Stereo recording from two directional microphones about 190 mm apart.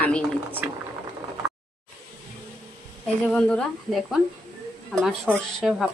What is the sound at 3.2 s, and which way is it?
A woman's voice, 5° left (ahead or behind).